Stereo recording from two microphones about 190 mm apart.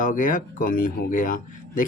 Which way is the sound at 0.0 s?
45° left (ahead or behind).